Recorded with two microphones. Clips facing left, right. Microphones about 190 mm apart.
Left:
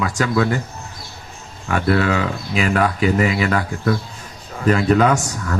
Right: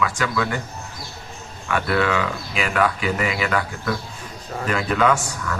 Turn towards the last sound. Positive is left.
turn(degrees=40)  # may be behind; listen again after turning